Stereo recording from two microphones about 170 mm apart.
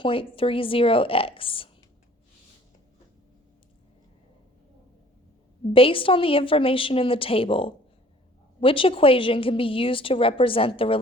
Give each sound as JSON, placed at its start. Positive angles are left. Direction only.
{"t": 0.0, "sound": "a woman's voice", "side_deg": 30}
{"t": 5.7, "sound": "a woman's voice", "side_deg": 30}